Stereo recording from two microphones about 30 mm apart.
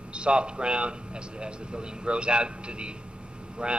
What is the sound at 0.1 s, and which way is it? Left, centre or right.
A man's voice, right.